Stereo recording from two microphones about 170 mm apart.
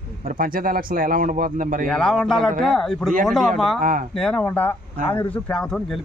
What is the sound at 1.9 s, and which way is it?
A man's voice, 5° left (ahead or behind).